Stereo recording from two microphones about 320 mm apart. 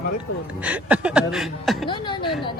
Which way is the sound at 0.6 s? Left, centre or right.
Centre.